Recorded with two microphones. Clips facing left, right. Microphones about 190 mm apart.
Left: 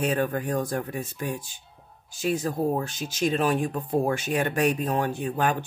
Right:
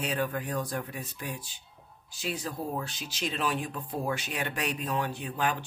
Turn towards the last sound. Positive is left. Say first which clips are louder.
# left 6 dB
turn(degrees=50)  # may be behind; listen again after turning